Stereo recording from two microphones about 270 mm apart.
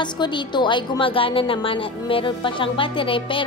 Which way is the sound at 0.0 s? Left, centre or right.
Centre.